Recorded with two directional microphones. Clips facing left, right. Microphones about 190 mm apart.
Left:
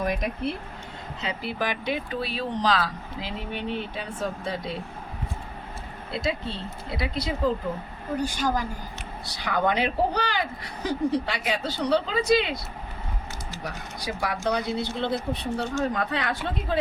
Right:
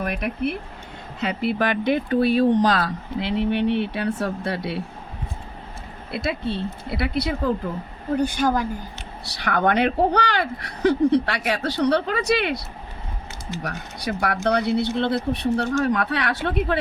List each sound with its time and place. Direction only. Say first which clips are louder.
0.0 s speech: right 2 dB; 65° right (ahead or behind)
6.1 s speech: right 4 dB; 60° right (ahead or behind)
13.7 s speech: right 4 dB; 65° right (ahead or behind)